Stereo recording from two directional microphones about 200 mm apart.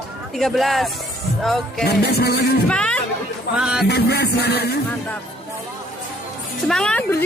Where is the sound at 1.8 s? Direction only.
50° left (ahead or behind).